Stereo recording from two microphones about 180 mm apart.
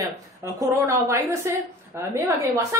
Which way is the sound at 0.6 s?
15° right (ahead or behind).